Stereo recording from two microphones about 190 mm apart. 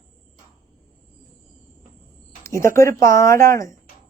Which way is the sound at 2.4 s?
15° left (ahead or behind).